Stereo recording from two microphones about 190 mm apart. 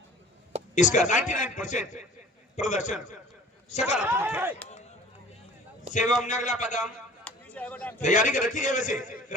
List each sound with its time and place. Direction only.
0.8 s a man's voice: 40° left (ahead or behind)
4.0 s speech: 10° right (ahead or behind)
5.9 s a man's voice: 40° left (ahead or behind)
6.8 s a sound: 5° left (ahead or behind)
8.0 s a man's voice: 40° left (ahead or behind)